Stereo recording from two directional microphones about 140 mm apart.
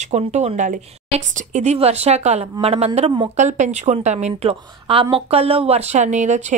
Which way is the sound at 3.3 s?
55° right (ahead or behind).